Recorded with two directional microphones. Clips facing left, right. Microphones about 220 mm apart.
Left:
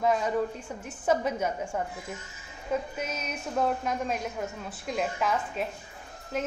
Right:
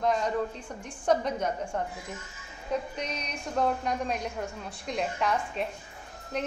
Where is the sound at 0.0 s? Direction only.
5° left (ahead or behind).